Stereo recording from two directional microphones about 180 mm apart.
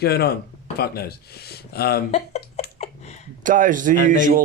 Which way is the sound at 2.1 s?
40° left (ahead or behind).